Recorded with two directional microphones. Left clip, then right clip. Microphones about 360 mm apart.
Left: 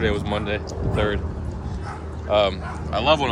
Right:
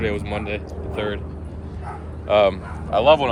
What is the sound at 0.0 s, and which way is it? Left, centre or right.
Speech, centre.